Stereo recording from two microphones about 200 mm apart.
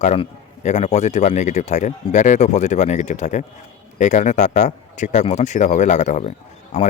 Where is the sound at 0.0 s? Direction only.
35° left (ahead or behind).